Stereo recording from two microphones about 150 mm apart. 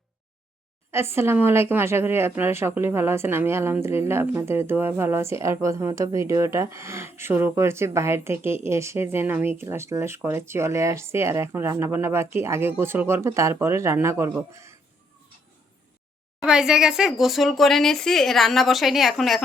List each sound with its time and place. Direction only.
0.9 s speech: 15° right (ahead or behind)
16.4 s speech: 5° right (ahead or behind)